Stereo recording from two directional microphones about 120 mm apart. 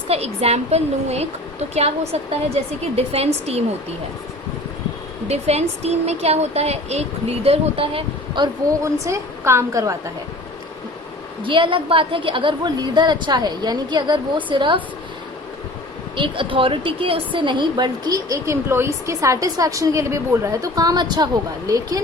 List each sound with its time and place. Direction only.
0.1 s speech: 60° right (ahead or behind)
5.3 s speech: 65° right (ahead or behind)
8.8 s a woman's voice: 25° right (ahead or behind)
11.4 s a woman's voice: 45° right (ahead or behind)
16.1 s a woman's voice: 45° right (ahead or behind)